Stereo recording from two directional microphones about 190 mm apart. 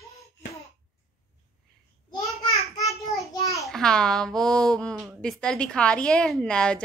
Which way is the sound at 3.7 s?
5° left (ahead or behind).